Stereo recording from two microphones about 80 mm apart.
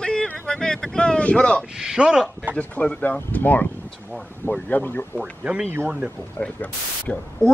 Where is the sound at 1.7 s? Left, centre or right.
Centre.